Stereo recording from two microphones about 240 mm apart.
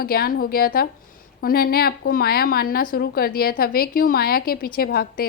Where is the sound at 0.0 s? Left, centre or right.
Left.